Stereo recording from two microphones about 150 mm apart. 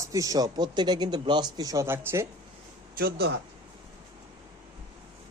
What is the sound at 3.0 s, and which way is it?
Speech, 90° right.